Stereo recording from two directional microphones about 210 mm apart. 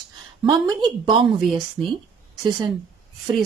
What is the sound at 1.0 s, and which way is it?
Speech, 20° right (ahead or behind).